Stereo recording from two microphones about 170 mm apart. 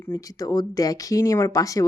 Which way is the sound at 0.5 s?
20° left (ahead or behind).